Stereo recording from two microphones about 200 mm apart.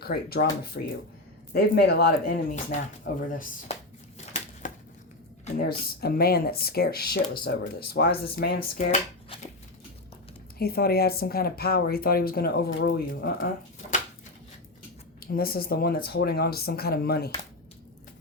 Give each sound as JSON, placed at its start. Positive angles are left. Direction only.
{"t": 0.0, "sound": "speech", "side_deg": 50}
{"t": 4.6, "sound": "a sound", "side_deg": 40}
{"t": 5.6, "sound": "speech", "side_deg": 50}
{"t": 10.6, "sound": "speech", "side_deg": 50}
{"t": 15.2, "sound": "speech", "side_deg": 50}